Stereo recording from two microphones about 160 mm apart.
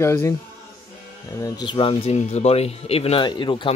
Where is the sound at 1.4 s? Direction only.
30° left (ahead or behind).